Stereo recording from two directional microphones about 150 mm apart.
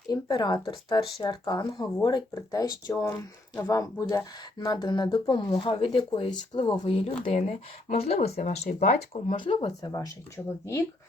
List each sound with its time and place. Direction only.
0.1 s speech: 30° left (ahead or behind)
9.8 s speech: 25° left (ahead or behind)